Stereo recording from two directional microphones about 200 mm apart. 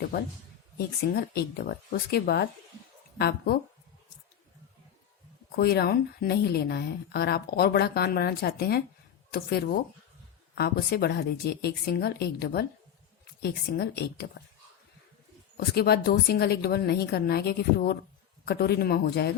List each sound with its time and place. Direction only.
0.8 s speech: 50° left (ahead or behind)
5.5 s speech: 50° left (ahead or behind)
15.5 s speech: 50° left (ahead or behind)